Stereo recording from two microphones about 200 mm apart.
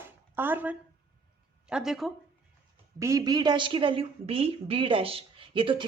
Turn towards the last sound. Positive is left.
turn(degrees=-25)  # may be behind; listen again after turning